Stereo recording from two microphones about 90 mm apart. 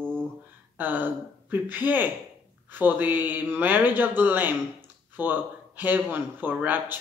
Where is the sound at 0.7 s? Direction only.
20° right (ahead or behind).